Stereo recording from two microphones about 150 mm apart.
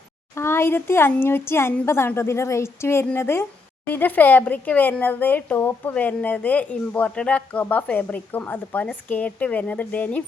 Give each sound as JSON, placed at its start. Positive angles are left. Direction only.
{"t": 0.3, "sound": "speech", "side_deg": 15}